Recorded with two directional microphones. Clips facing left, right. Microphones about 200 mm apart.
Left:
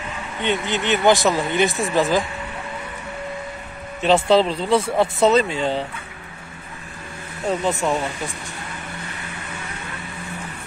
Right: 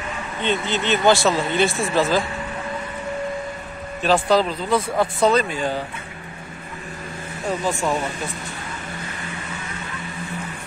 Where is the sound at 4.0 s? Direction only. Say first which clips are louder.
Left 2 dB; 25° left (ahead or behind).